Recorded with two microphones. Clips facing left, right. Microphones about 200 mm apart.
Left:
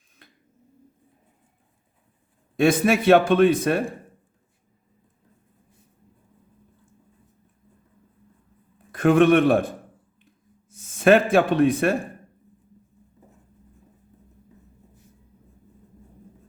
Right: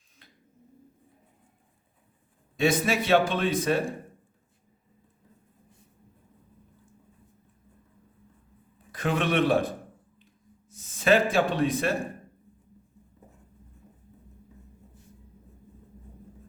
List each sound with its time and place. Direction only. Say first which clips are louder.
2.6 s a man's voice: left 6 dB; 55° left (ahead or behind)
8.9 s a man's voice: left 11 dB; 55° left (ahead or behind)
10.7 s speech: left 6 dB; 55° left (ahead or behind)